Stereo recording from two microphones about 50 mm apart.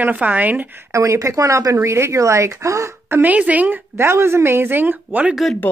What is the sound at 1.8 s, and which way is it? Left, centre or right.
Speech, right.